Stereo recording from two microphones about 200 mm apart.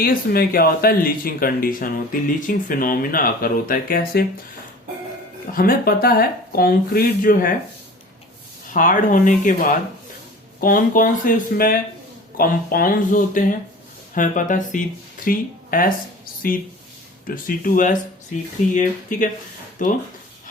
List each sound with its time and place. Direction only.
0.0 s speech: 45° left (ahead or behind)
5.5 s speech: 45° left (ahead or behind)
8.7 s speech: 40° left (ahead or behind)